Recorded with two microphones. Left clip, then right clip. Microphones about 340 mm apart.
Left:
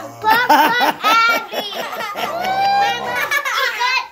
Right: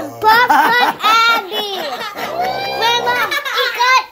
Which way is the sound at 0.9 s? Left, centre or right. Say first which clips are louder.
Right 2 dB; right.